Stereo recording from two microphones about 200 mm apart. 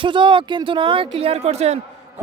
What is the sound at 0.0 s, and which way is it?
Speech, 25° right (ahead or behind).